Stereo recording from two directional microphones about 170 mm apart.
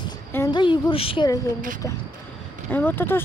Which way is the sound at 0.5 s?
30° left (ahead or behind).